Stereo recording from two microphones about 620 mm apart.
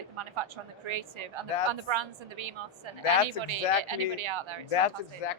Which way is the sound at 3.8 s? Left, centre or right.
Right.